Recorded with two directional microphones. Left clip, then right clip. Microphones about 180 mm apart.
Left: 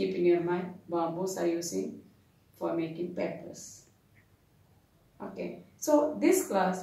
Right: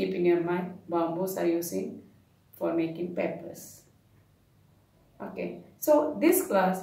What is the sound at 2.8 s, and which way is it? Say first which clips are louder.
Speech: right 3 dB; 15° right (ahead or behind).